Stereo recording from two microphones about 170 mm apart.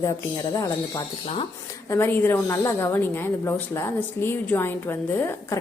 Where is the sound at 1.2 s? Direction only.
35° left (ahead or behind).